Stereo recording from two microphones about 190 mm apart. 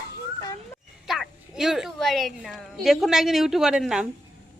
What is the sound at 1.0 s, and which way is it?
A woman's voice, centre (ahead or behind).